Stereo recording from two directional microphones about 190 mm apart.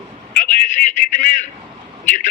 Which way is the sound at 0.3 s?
40° left (ahead or behind).